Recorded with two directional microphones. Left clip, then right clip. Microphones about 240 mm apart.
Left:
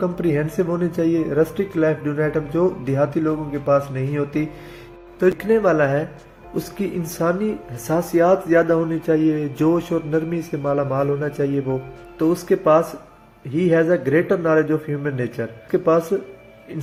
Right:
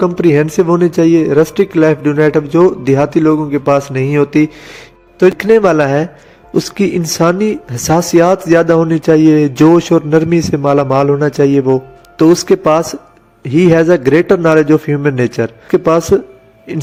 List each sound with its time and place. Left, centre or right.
0.0 s speech: right